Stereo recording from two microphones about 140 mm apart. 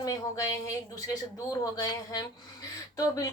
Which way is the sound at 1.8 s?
25° left (ahead or behind).